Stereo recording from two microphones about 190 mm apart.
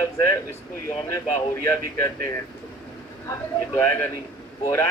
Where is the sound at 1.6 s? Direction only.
15° left (ahead or behind).